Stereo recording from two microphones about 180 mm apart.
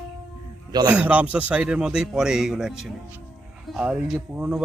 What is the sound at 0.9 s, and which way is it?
Speech, 10° right (ahead or behind).